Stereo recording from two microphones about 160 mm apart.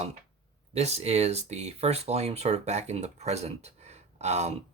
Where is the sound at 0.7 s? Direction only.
40° right (ahead or behind).